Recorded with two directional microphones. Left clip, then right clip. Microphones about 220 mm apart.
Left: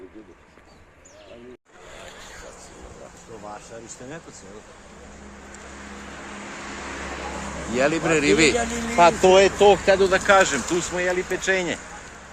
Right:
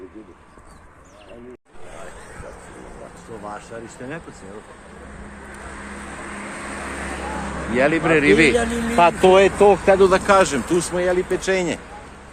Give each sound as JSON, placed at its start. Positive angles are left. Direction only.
{"t": 5.6, "sound": "vehicle", "side_deg": -50}
{"t": 7.7, "sound": "a man's voice", "side_deg": 15}
{"t": 8.5, "sound": "speech", "side_deg": -40}
{"t": 9.2, "sound": "speech", "side_deg": -5}
{"t": 10.0, "sound": "speech", "side_deg": -20}